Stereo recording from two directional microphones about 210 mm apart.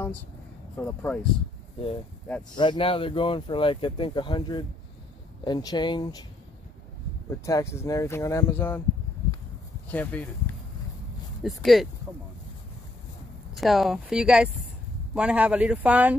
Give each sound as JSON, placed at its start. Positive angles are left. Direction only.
{"t": 0.7, "sound": "speech", "side_deg": 5}
{"t": 2.5, "sound": "speech", "side_deg": 20}
{"t": 7.2, "sound": "speech", "side_deg": 15}
{"t": 9.8, "sound": "speech", "side_deg": 5}
{"t": 13.6, "sound": "speech", "side_deg": 0}